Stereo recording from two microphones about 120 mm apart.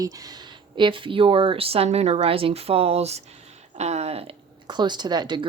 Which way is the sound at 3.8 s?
65° right (ahead or behind).